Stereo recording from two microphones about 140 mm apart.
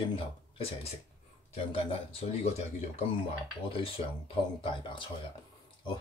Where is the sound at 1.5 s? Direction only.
45° left (ahead or behind).